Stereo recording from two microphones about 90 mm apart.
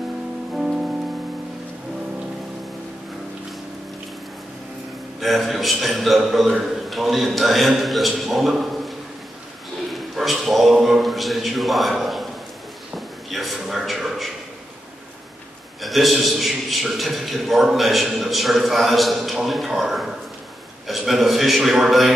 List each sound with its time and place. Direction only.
5.2 s a man's voice: centre (ahead or behind)
9.9 s a sound: centre (ahead or behind)
12.9 s a man's voice: centre (ahead or behind)
15.8 s a man's voice: centre (ahead or behind)